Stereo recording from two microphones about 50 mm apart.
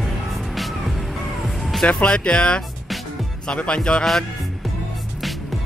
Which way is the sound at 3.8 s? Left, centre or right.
Centre.